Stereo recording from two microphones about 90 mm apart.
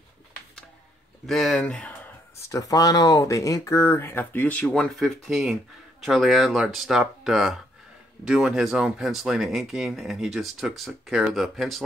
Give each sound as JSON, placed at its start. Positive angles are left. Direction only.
{"t": 1.2, "sound": "speech", "side_deg": 5}
{"t": 2.5, "sound": "speech", "side_deg": 40}